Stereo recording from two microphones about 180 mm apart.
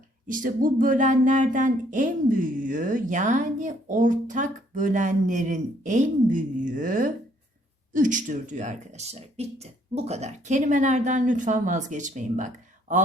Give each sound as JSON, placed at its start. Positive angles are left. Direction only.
{"t": 0.3, "sound": "speech", "side_deg": -50}